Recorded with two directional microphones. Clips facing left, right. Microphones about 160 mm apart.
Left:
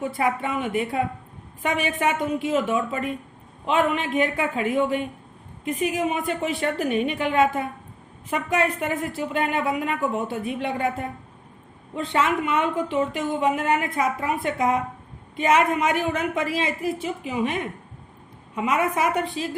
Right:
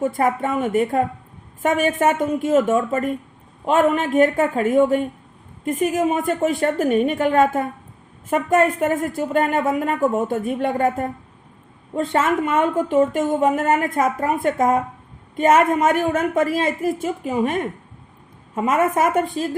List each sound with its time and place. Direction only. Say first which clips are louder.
0.0 s a woman's voice: right 5 dB; 45° right (ahead or behind)